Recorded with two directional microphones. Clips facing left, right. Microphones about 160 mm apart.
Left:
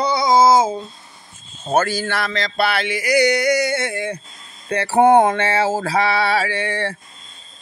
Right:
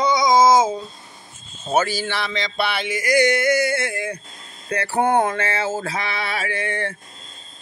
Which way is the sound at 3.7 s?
30° left (ahead or behind).